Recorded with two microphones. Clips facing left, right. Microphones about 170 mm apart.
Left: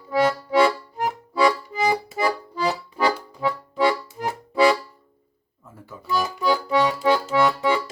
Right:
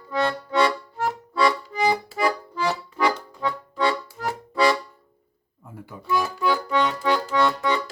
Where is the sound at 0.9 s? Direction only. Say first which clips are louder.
Left 1 dB; 20° left (ahead or behind).